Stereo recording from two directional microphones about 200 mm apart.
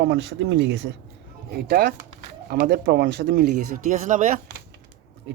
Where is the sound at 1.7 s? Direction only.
50° right (ahead or behind).